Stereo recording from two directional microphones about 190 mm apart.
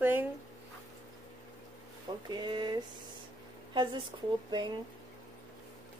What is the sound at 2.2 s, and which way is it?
Speech, 25° right (ahead or behind).